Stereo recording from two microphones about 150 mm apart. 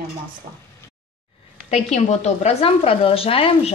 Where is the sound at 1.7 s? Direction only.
50° left (ahead or behind).